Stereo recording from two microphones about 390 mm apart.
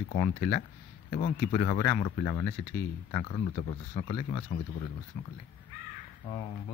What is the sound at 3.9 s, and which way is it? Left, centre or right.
Speech, centre.